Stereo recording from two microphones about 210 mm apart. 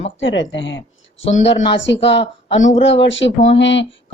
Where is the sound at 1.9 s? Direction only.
60° left (ahead or behind).